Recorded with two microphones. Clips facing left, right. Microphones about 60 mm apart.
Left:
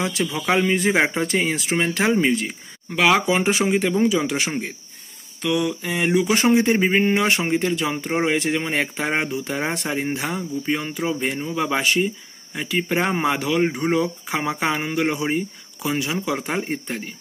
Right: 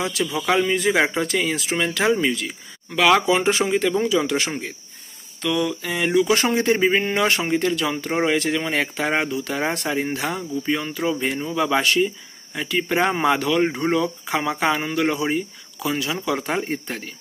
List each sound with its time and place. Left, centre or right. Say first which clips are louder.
0.0 s speech: even; left
0.9 s speech: even; centre
1.2 s speech: left 1 dB; left
2.9 s speech: right 1 dB; centre
8.7 s speech: right 1 dB; centre
9.6 s speech: right 2 dB; centre
16.3 s speech: right 1 dB; centre